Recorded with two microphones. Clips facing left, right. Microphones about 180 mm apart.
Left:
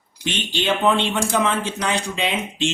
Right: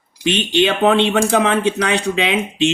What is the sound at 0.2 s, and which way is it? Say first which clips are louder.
Speech: right 10 dB; 70° right (ahead or behind).